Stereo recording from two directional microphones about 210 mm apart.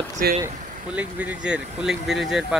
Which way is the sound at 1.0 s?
5° right (ahead or behind).